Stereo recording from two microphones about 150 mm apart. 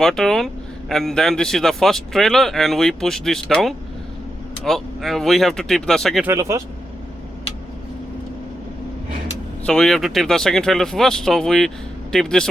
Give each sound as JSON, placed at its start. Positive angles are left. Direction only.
{"t": 0.0, "sound": "speech", "side_deg": 5}
{"t": 6.2, "sound": "speech", "side_deg": -20}
{"t": 9.6, "sound": "speech", "side_deg": 5}